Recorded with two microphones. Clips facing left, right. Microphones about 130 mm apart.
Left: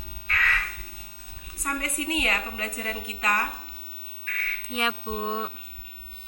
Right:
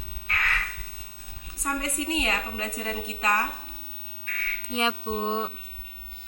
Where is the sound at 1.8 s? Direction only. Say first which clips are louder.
Even; 25° right (ahead or behind).